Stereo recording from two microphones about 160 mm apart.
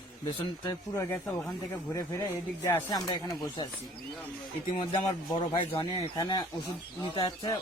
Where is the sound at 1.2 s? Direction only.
Centre (ahead or behind).